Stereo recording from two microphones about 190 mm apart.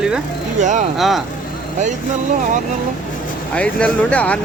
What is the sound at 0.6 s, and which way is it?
Speech, 40° right (ahead or behind).